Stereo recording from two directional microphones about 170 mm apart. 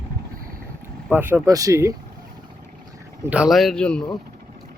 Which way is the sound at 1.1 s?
10° right (ahead or behind).